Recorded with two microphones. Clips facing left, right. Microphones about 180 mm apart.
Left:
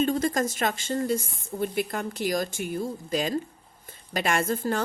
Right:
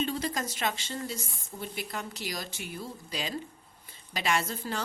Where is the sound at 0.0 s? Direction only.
50° left (ahead or behind).